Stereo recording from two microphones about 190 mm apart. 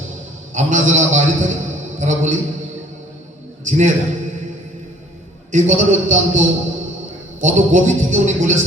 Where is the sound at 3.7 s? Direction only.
40° right (ahead or behind).